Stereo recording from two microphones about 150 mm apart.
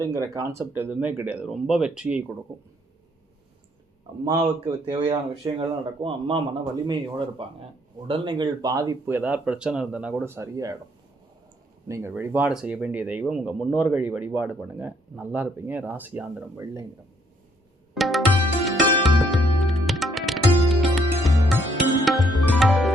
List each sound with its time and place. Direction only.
0.0 s speech: 25° right (ahead or behind)
4.3 s speech: 30° right (ahead or behind)
11.9 s speech: 20° right (ahead or behind)
17.9 s music: centre (ahead or behind)